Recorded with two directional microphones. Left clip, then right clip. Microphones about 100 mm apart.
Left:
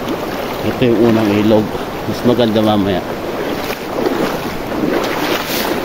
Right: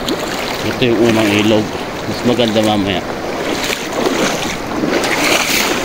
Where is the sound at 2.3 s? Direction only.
45° left (ahead or behind).